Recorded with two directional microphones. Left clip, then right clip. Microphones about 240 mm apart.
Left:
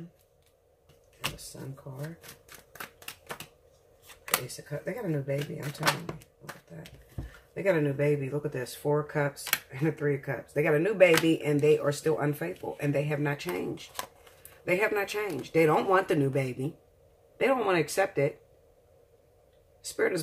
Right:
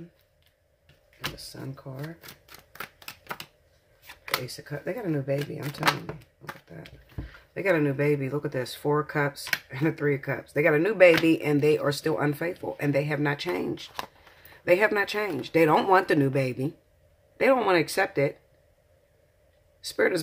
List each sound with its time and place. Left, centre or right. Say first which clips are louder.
1.9 s speech: right 4 dB; right
4.5 s speech: right 3 dB; right
7.5 s speech: right 2 dB; right
19.8 s speech: right 4 dB; right